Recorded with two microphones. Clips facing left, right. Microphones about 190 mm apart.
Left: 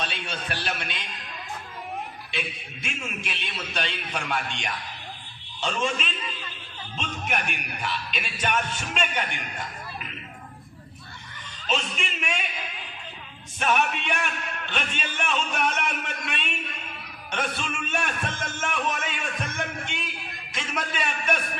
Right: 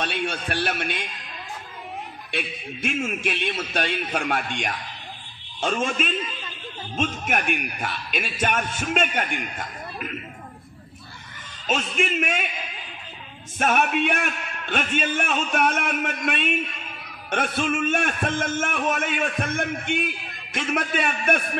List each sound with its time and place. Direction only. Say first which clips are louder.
0.0 s a man's voice: right 6 dB; 55° right (ahead or behind)
2.3 s a man's voice: right 5 dB; 50° right (ahead or behind)
11.6 s a man's voice: right 5 dB; 50° right (ahead or behind)
13.6 s a man's voice: right 4 dB; 50° right (ahead or behind)